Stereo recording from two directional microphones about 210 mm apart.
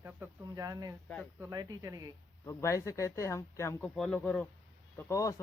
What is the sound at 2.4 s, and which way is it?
Speech, 15° left (ahead or behind).